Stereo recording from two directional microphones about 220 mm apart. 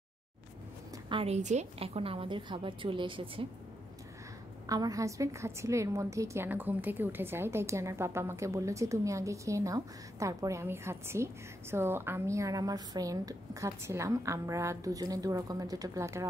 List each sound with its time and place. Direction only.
1.0 s a woman's voice: 25° right (ahead or behind)
4.6 s a woman's voice: 15° right (ahead or behind)